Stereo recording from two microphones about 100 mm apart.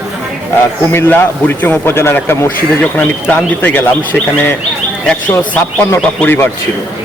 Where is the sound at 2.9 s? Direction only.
15° left (ahead or behind).